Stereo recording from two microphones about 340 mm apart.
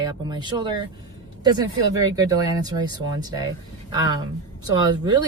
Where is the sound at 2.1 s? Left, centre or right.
Centre.